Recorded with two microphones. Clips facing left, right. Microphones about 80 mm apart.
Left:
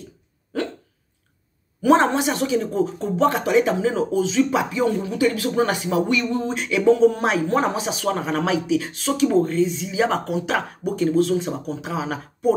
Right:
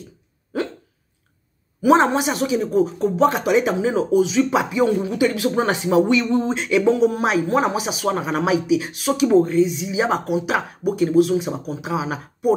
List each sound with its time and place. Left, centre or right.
1.8 s speech: centre